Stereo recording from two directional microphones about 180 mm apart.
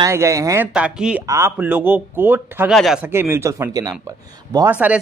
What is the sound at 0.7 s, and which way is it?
Speech, 5° right (ahead or behind).